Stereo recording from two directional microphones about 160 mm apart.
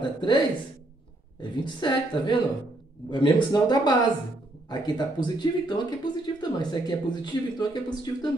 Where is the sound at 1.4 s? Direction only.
30° left (ahead or behind).